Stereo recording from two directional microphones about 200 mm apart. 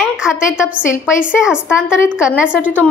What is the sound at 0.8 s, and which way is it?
Speech, 40° left (ahead or behind).